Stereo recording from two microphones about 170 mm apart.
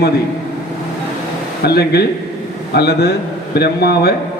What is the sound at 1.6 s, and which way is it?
A man's voice, 70° left (ahead or behind).